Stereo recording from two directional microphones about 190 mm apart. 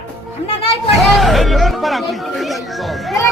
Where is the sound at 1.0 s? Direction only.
Centre (ahead or behind).